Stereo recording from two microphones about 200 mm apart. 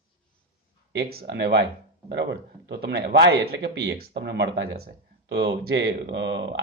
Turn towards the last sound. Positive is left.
turn(degrees=-60)  # may be behind; listen again after turning